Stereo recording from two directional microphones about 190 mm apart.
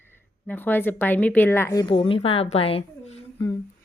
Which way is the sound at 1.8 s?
25° left (ahead or behind).